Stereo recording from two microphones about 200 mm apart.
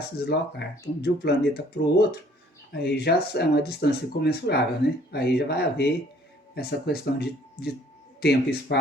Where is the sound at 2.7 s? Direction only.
55° left (ahead or behind).